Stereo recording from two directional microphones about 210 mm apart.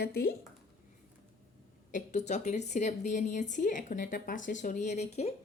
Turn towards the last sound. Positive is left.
turn(degrees=30)  # may be behind; listen again after turning